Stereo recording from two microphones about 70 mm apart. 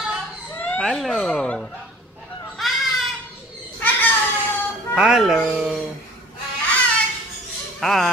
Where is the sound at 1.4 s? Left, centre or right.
Centre.